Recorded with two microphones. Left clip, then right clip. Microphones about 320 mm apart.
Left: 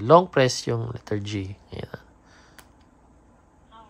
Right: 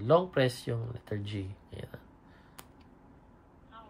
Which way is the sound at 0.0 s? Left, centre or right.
Centre.